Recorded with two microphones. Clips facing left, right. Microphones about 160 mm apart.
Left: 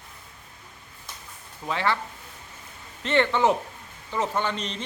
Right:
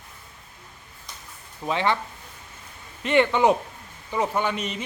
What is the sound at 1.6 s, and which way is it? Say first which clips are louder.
Speech: right 3 dB; 20° right (ahead or behind).